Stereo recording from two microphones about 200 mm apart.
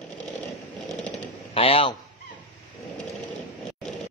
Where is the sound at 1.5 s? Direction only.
30° left (ahead or behind).